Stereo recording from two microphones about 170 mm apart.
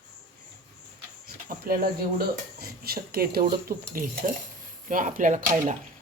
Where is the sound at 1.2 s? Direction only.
60° right (ahead or behind).